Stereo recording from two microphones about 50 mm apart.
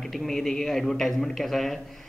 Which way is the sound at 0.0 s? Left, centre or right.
Centre.